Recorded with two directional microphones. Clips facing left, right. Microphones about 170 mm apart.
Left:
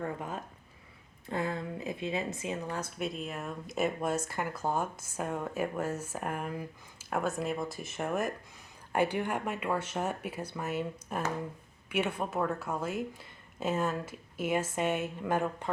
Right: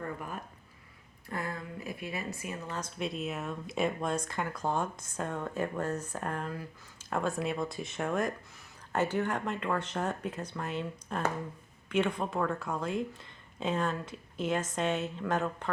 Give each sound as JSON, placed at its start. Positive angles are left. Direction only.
{"t": 0.0, "sound": "speech", "side_deg": 20}
{"t": 3.0, "sound": "speech", "side_deg": 0}
{"t": 7.1, "sound": "speech", "side_deg": 5}